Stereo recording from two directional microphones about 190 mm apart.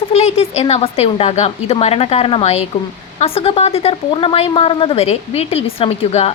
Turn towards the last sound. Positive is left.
turn(degrees=30)  # may be behind; listen again after turning